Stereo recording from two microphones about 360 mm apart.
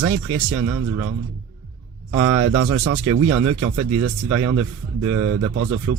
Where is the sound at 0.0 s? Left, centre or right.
Right.